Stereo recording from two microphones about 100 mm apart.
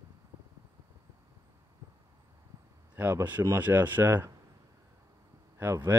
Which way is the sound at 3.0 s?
20° right (ahead or behind).